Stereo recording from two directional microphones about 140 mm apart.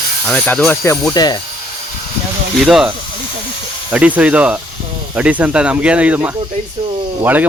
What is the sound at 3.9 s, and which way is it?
Speech, 10° right (ahead or behind).